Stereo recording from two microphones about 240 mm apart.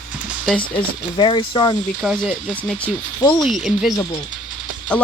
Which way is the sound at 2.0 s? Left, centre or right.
Centre.